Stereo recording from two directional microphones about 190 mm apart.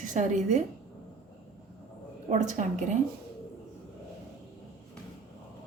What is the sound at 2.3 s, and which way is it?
Speech, 40° right (ahead or behind).